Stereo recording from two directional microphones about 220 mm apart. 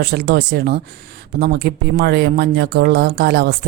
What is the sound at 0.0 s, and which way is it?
Speech, 45° right (ahead or behind).